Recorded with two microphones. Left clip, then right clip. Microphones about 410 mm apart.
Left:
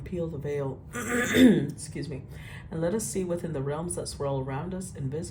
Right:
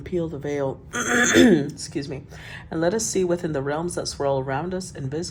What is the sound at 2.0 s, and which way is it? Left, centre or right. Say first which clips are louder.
Speech: right 8 dB; centre.